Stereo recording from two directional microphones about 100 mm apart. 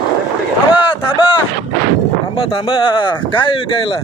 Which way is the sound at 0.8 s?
55° left (ahead or behind).